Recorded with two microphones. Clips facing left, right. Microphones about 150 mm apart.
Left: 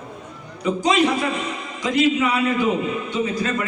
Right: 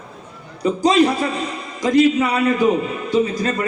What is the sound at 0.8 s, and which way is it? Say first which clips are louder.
A man's voice: right 4 dB; 35° right (ahead or behind).